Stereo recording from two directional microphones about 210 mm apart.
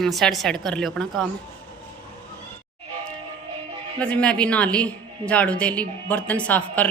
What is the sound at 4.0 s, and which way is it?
Speech, 5° left (ahead or behind).